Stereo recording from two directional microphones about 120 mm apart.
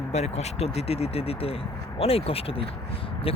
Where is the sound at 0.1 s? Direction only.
65° left (ahead or behind).